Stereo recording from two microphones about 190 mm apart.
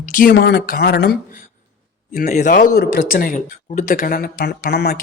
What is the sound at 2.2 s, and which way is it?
Speech, 40° left (ahead or behind).